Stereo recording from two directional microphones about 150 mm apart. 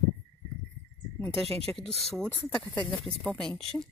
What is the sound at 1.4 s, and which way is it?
Speech, 40° right (ahead or behind).